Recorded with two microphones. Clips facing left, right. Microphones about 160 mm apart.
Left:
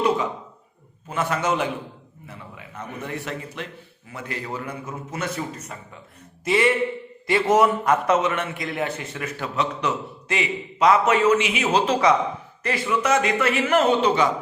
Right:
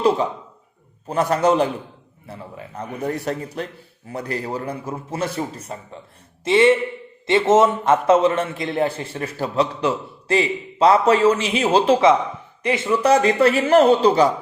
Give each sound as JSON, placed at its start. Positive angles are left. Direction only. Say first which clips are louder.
{"t": 1.0, "sound": "a man's voice", "louder": "right 6 dB", "side_deg": -40}